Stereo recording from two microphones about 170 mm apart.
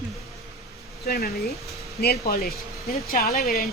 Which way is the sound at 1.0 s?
65° left (ahead or behind).